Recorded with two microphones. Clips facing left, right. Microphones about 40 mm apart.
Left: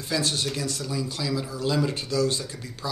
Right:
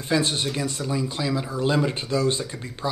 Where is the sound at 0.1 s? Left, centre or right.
Right.